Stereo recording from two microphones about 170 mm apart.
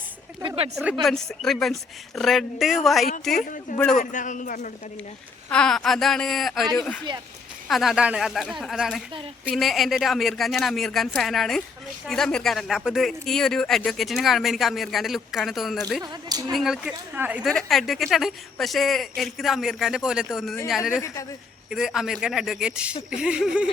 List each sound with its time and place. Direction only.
0.4 s speech: 35° right (ahead or behind)
1.0 s speech: centre (ahead or behind)
3.4 s a man's voice: 50° left (ahead or behind)
5.5 s speech: 5° left (ahead or behind)